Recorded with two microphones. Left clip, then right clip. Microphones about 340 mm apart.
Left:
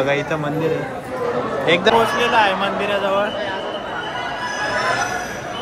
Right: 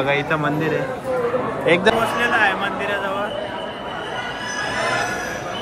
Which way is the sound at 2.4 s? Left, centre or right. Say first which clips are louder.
Left 2 dB; centre.